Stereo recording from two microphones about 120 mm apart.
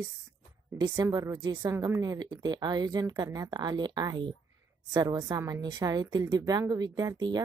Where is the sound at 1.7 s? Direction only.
25° right (ahead or behind).